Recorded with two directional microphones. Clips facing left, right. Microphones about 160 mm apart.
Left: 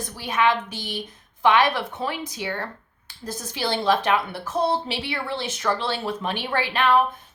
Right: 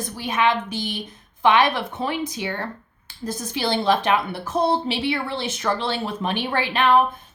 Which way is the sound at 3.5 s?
20° right (ahead or behind).